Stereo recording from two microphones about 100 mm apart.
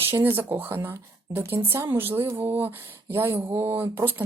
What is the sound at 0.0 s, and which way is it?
Speech, 25° right (ahead or behind).